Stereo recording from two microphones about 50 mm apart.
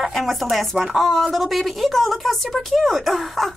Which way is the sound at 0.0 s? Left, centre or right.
Centre.